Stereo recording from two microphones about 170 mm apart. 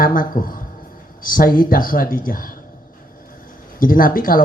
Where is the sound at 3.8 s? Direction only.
55° left (ahead or behind).